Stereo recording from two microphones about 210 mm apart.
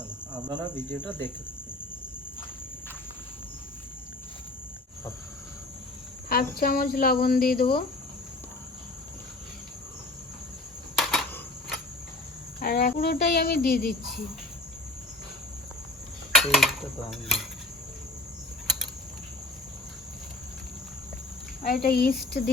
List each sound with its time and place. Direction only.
0.6 s cricket: 10° left (ahead or behind)
6.2 s speech: 45° left (ahead or behind)
10.9 s a sound: centre (ahead or behind)
12.5 s speech: 45° left (ahead or behind)
16.3 s dishes: centre (ahead or behind)
21.7 s speech: 50° left (ahead or behind)